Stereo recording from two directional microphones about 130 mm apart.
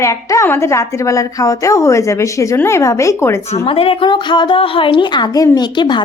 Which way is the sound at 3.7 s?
45° left (ahead or behind).